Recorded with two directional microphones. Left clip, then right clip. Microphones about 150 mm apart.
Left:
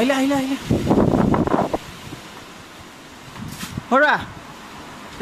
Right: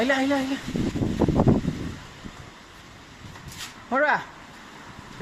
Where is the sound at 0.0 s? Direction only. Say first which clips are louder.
Left 4 dB; 15° left (ahead or behind).